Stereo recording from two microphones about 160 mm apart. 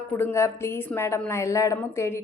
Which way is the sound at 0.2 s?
15° left (ahead or behind).